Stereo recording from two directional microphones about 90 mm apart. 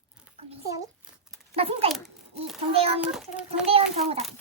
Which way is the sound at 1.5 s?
90° right.